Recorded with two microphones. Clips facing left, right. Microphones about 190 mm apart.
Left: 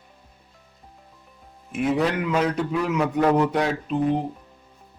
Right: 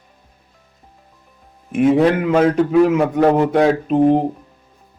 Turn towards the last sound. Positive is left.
turn(degrees=-45)  # may be behind; listen again after turning